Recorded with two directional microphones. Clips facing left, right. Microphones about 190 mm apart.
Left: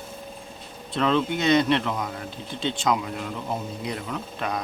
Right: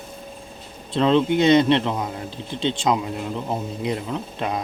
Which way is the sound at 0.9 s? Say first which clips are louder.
Right 5 dB; 25° right (ahead or behind).